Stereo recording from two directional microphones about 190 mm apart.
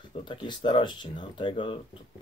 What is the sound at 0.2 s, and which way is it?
Speech, 25° left (ahead or behind).